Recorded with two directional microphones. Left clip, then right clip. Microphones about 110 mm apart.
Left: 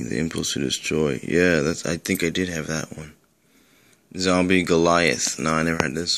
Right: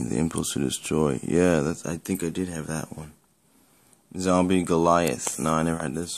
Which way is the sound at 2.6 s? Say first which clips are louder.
Left 5 dB; 20° right (ahead or behind).